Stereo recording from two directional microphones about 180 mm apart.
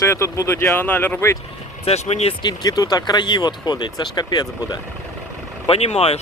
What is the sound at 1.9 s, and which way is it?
Speech, 40° left (ahead or behind).